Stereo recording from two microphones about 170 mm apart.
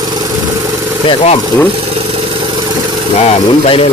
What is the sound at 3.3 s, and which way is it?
Speech, 35° left (ahead or behind).